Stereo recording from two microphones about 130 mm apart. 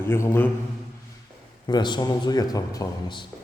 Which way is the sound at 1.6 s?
35° left (ahead or behind).